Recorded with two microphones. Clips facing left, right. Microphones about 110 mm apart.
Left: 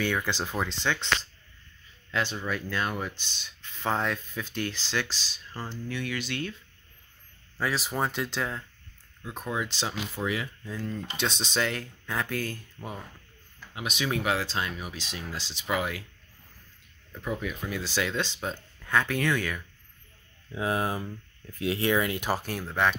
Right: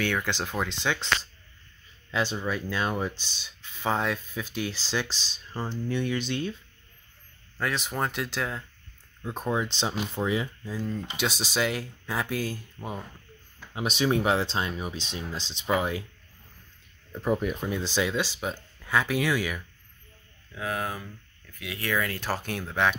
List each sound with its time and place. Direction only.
0.0 s speech: 5° left (ahead or behind)
2.3 s speech: 15° right (ahead or behind)
7.5 s speech: centre (ahead or behind)
9.2 s speech: 30° right (ahead or behind)
10.6 s speech: 10° right (ahead or behind)
13.7 s speech: 30° right (ahead or behind)
17.1 s speech: 45° right (ahead or behind)
17.6 s speech: 25° right (ahead or behind); by 19.6 s 10° right (ahead or behind)
20.5 s speech: 25° left (ahead or behind)
22.4 s speech: centre (ahead or behind)